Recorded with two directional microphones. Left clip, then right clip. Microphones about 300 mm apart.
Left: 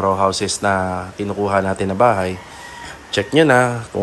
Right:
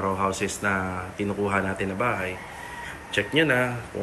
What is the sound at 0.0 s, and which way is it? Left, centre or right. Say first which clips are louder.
Speech: left 9 dB; centre.